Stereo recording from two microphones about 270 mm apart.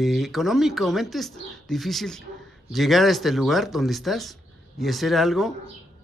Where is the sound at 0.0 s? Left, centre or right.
Centre.